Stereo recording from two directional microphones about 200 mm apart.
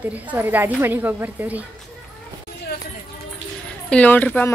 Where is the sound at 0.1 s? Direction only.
10° right (ahead or behind).